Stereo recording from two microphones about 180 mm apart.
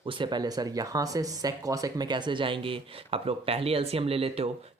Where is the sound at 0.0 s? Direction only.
25° right (ahead or behind).